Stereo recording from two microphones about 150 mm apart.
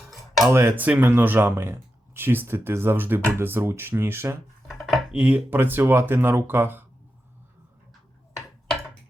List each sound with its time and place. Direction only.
0.4 s speech: 15° right (ahead or behind)
4.7 s dishes: centre (ahead or behind)
5.2 s speech: 10° right (ahead or behind)